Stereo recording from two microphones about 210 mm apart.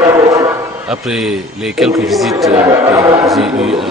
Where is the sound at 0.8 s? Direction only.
Centre (ahead or behind).